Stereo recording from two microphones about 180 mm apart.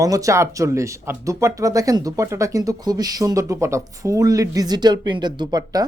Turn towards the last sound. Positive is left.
turn(degrees=-20)  # may be behind; listen again after turning